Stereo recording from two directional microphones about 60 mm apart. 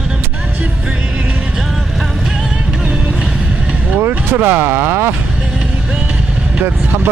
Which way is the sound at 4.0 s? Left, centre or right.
Right.